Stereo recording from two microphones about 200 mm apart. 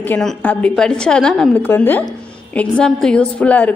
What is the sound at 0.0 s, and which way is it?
A woman's voice, 5° left (ahead or behind).